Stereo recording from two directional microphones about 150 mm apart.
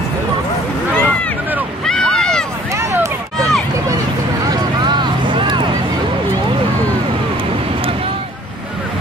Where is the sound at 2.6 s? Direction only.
20° right (ahead or behind).